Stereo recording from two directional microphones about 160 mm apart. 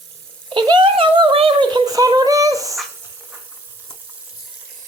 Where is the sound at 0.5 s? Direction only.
30° right (ahead or behind).